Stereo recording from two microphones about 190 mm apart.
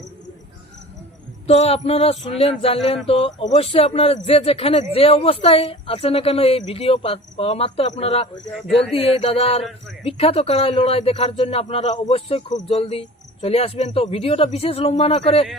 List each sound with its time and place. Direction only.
1.5 s a man's voice: 35° left (ahead or behind)